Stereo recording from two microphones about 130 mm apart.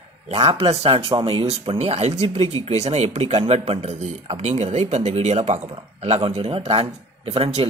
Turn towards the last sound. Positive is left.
turn(degrees=-50)  # may be behind; listen again after turning